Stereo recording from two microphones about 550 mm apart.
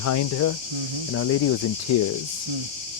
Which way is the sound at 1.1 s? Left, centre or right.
Left.